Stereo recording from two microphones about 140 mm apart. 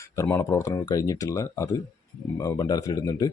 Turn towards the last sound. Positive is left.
turn(degrees=25)  # may be behind; listen again after turning